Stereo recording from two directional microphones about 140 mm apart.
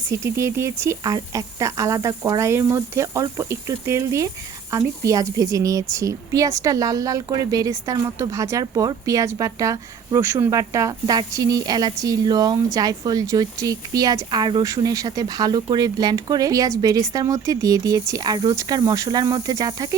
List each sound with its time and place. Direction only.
0.1 s a woman's voice: 20° right (ahead or behind)